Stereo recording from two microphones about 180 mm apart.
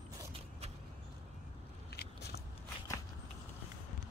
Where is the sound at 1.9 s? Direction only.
65° left (ahead or behind).